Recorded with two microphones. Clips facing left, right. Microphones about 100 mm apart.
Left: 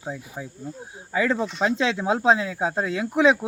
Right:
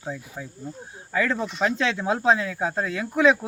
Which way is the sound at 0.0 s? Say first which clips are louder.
Left 1 dB; 15° left (ahead or behind).